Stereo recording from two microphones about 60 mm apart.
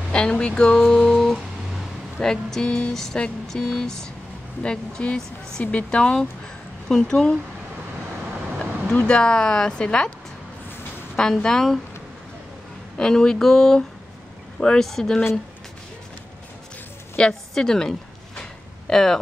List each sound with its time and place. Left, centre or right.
0.1 s speech: centre
0.8 s a sound: centre
2.1 s speech: centre
2.9 s a sound: centre
3.5 s speech: centre
9.0 s speech: centre
11.1 s speech: centre
12.9 s speech: centre
17.2 s a woman's voice: centre
18.4 s a sound: centre